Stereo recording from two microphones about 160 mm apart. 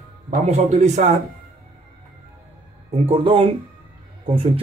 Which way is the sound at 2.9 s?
35° right (ahead or behind).